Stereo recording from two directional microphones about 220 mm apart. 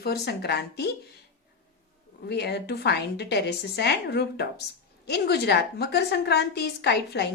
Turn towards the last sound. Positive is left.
turn(degrees=50)  # may be behind; listen again after turning